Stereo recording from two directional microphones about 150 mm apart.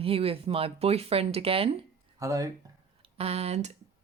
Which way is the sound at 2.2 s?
20° right (ahead or behind).